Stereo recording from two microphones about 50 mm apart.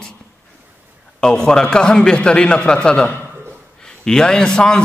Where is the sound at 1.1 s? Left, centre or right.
Centre.